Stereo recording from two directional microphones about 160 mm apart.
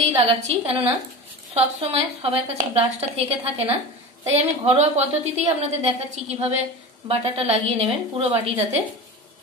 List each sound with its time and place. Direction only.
0.0 s a woman's voice: 40° right (ahead or behind)
4.3 s a woman's voice: 45° right (ahead or behind)